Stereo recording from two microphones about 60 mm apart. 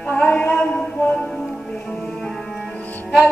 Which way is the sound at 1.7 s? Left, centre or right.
Centre.